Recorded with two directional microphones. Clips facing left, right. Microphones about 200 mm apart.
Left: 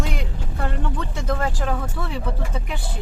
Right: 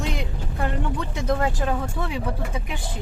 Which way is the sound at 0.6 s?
15° right (ahead or behind).